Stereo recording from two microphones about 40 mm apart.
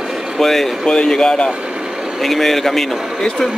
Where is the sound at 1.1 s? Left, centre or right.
Centre.